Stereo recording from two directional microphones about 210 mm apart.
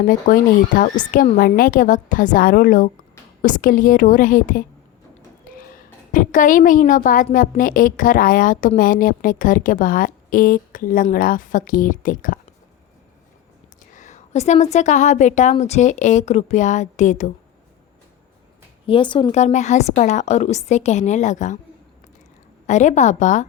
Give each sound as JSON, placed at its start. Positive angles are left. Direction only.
{"t": 0.0, "sound": "a woman's voice", "side_deg": 40}
{"t": 6.1, "sound": "a woman's voice", "side_deg": 40}
{"t": 13.9, "sound": "a woman's voice", "side_deg": 35}
{"t": 18.9, "sound": "a woman's voice", "side_deg": 25}
{"t": 22.6, "sound": "a woman's voice", "side_deg": 35}